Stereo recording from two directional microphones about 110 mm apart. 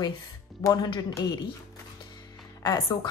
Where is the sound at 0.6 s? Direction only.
40° left (ahead or behind).